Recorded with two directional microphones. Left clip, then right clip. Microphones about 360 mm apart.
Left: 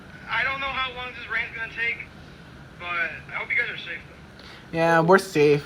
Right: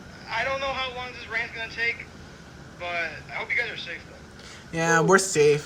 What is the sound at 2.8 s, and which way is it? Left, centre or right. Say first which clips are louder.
Speech: left 2 dB; right.